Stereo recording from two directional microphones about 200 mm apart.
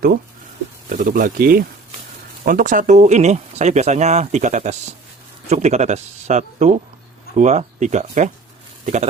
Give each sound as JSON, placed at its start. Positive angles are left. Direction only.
{"t": 0.9, "sound": "speech", "side_deg": -40}